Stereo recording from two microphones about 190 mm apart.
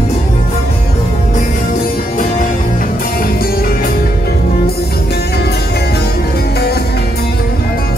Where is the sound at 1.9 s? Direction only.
45° left (ahead or behind).